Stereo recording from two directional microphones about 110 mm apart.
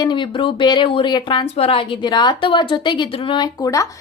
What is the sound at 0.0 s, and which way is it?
A woman's voice, 45° left (ahead or behind).